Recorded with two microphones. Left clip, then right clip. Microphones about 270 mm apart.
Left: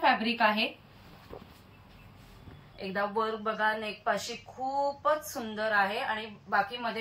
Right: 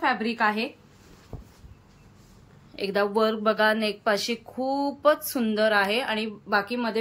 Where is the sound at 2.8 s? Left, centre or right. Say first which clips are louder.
Right 7 dB; right.